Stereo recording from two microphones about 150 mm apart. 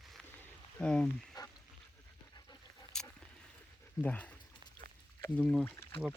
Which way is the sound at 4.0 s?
10° left (ahead or behind).